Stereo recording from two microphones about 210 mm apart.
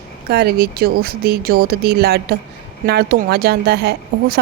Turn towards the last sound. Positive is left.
turn(degrees=-50)  # may be behind; listen again after turning